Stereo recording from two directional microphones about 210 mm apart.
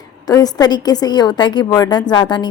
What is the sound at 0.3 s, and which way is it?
A woman's voice, 15° left (ahead or behind).